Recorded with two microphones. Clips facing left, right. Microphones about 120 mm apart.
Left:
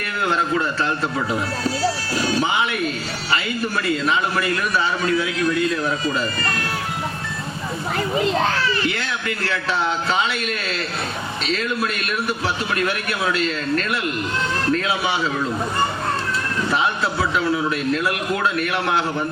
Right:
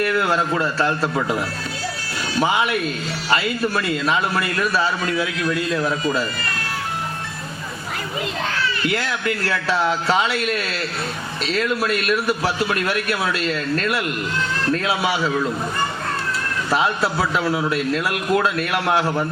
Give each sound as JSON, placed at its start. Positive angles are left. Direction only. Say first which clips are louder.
{"t": 2.5, "sound": "a man's voice", "louder": "right 1 dB", "side_deg": 25}
{"t": 4.4, "sound": "a man's voice", "louder": "even", "side_deg": 30}
{"t": 8.2, "sound": "a child's voice", "louder": "left 4 dB", "side_deg": 35}
{"t": 10.2, "sound": "a man's voice", "louder": "right 2 dB", "side_deg": 25}
{"t": 17.0, "sound": "speech", "louder": "right 1 dB", "side_deg": -30}